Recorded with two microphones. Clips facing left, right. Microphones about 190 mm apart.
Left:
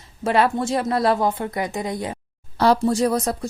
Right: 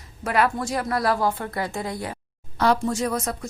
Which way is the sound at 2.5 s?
35° left (ahead or behind).